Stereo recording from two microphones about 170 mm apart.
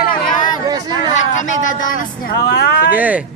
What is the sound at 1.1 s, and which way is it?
Speech, 45° left (ahead or behind).